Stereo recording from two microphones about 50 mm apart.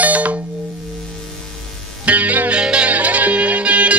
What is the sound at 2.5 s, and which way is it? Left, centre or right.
Music, right.